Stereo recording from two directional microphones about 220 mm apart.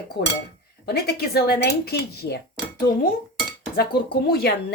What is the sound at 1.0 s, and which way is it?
Speech, 45° left (ahead or behind).